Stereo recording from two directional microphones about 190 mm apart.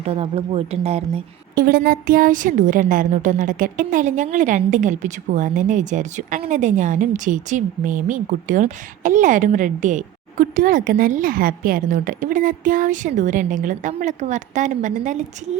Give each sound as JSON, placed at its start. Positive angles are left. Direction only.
{"t": 0.2, "sound": "a woman's voice", "side_deg": -30}
{"t": 1.5, "sound": "a woman's voice", "side_deg": -50}